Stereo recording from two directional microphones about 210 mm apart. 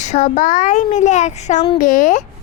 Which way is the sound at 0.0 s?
35° left (ahead or behind).